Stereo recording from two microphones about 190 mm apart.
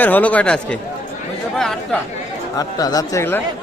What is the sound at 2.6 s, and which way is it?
Speech, 20° left (ahead or behind).